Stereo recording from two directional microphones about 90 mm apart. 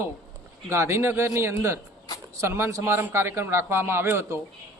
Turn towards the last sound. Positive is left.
turn(degrees=-30)  # may be behind; listen again after turning